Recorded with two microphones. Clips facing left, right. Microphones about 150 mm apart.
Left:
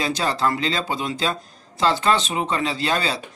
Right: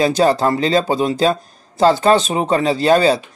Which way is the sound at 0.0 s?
40° right (ahead or behind).